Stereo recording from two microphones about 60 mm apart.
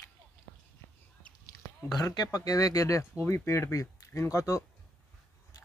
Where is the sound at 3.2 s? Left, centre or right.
Left.